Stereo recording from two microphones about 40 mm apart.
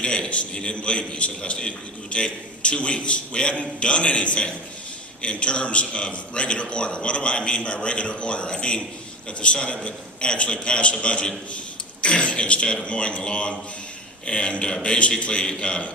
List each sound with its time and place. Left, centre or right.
0.0 s a man's voice: left